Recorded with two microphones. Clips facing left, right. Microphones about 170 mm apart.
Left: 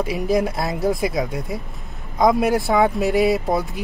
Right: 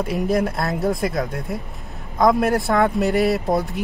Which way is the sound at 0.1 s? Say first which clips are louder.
Right 1 dB; centre (ahead or behind).